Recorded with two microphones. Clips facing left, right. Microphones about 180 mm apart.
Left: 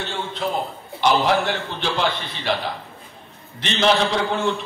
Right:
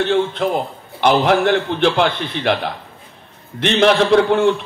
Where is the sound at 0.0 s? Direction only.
60° right (ahead or behind).